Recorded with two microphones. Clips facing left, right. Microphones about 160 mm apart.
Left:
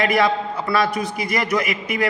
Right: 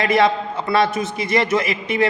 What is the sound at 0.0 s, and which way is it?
A man's voice, 25° right (ahead or behind).